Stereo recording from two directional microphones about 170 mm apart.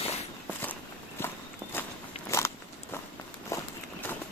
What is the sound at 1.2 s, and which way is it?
Walk, 15° left (ahead or behind).